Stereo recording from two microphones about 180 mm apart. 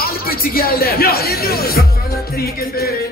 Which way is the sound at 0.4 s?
55° left (ahead or behind).